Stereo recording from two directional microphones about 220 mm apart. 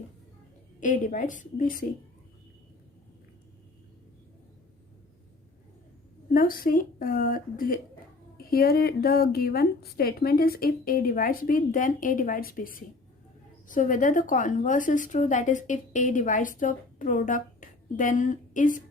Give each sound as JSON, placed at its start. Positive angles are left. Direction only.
{"t": 0.8, "sound": "a woman's voice", "side_deg": 35}
{"t": 6.3, "sound": "a woman's voice", "side_deg": 40}